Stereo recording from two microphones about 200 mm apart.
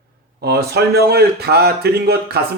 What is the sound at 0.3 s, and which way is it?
A man's voice, 55° right (ahead or behind).